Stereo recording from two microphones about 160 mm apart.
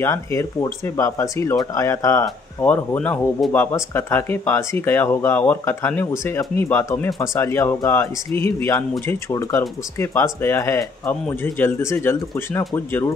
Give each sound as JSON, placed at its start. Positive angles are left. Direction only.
{"t": 0.0, "sound": "speech", "side_deg": 15}